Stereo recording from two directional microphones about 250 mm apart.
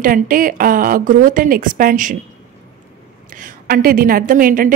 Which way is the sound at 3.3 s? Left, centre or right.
Right.